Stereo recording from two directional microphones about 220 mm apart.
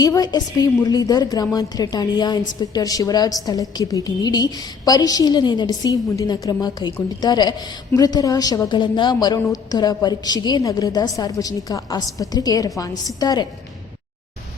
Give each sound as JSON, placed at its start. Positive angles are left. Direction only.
{"t": 0.0, "sound": "a woman's voice", "side_deg": 15}